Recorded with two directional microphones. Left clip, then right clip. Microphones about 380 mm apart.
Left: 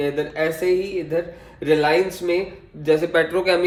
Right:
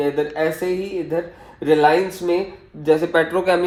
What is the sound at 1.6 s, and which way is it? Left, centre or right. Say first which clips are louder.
Speech: right 2 dB; centre.